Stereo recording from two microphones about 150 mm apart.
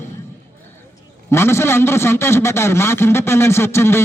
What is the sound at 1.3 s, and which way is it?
A man's voice, 15° left (ahead or behind).